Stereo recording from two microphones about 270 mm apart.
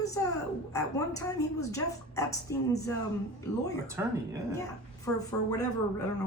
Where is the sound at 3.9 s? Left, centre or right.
Centre.